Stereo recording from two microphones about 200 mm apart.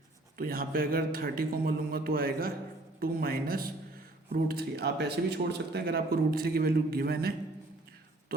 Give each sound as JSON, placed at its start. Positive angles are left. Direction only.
{"t": 0.3, "sound": "speech", "side_deg": -45}